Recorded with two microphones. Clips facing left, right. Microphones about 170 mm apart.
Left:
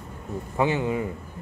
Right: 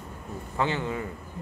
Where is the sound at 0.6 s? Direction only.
15° left (ahead or behind).